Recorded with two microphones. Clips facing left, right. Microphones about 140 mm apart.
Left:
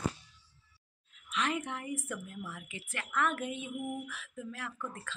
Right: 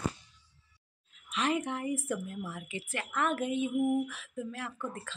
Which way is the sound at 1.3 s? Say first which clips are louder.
Right 3 dB; 30° right (ahead or behind).